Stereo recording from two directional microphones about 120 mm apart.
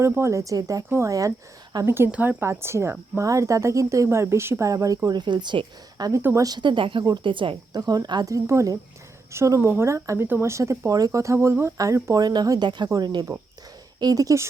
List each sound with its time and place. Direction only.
0.0 s speech: 25° right (ahead or behind); by 6.1 s 40° right (ahead or behind)
6.1 s speech: 25° right (ahead or behind)
12.2 s speech: 35° right (ahead or behind)